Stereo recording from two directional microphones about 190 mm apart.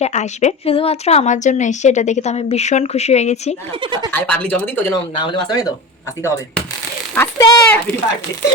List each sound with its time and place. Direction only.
0.0 s a woman's voice: 40° left (ahead or behind)
4.1 s speech: 10° left (ahead or behind)
5.1 s speech: 25° left (ahead or behind)
7.2 s speech: 10° left (ahead or behind)